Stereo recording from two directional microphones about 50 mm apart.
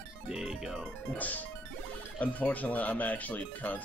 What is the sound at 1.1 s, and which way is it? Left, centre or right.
Speech, left.